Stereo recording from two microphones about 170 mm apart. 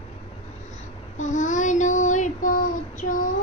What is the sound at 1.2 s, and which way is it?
Child singing, 45° left (ahead or behind).